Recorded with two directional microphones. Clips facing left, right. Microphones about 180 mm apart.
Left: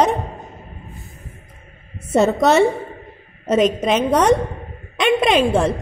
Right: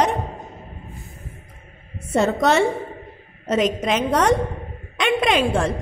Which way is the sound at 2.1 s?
20° left (ahead or behind).